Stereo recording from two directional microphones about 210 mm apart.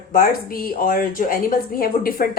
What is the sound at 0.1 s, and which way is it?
A woman's voice, 45° left (ahead or behind).